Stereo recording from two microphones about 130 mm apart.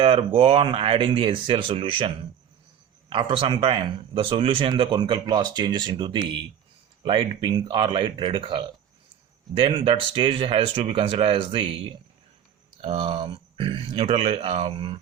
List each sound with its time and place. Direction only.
0.0 s speech: 45° right (ahead or behind)